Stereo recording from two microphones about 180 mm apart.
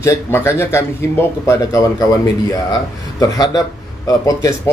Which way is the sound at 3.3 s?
20° left (ahead or behind).